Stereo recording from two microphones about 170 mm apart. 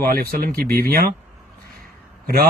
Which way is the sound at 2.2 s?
60° right (ahead or behind).